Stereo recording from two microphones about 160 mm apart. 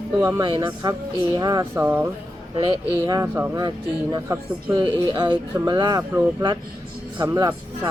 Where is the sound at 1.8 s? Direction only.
15° right (ahead or behind).